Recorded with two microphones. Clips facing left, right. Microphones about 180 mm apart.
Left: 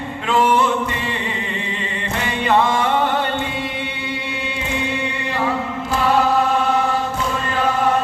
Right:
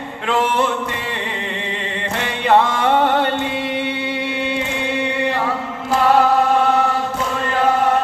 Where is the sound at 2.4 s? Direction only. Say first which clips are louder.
Right 3 dB; 60° right (ahead or behind).